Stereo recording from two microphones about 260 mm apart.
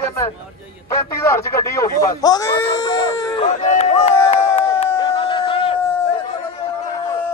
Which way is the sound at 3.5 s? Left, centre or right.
Left.